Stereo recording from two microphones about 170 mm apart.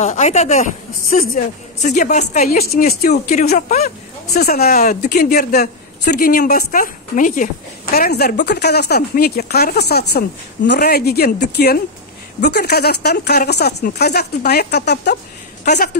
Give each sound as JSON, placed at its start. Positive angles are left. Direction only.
{"t": 0.0, "sound": "a woman's voice", "side_deg": 40}
{"t": 2.5, "sound": "speech", "side_deg": 60}
{"t": 3.4, "sound": "a woman's voice", "side_deg": 50}
{"t": 4.3, "sound": "speech", "side_deg": 65}
{"t": 4.7, "sound": "speech", "side_deg": 45}
{"t": 8.5, "sound": "speech", "side_deg": 75}